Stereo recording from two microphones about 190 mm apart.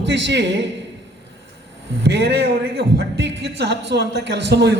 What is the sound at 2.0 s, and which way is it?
A man's voice, 60° right (ahead or behind).